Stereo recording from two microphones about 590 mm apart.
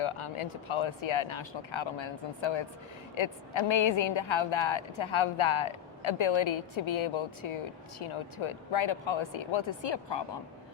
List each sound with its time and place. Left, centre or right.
0.0 s a woman's voice: left